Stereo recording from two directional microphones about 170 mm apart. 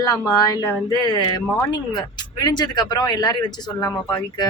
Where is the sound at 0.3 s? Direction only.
20° left (ahead or behind).